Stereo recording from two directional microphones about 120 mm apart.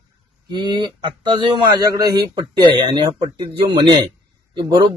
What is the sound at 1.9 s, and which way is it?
Speech, 35° right (ahead or behind).